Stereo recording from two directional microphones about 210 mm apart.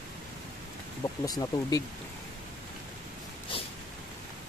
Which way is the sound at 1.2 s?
15° left (ahead or behind).